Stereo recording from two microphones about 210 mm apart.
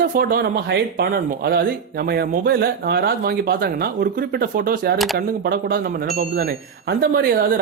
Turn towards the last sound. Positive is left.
turn(degrees=-45)  # may be behind; listen again after turning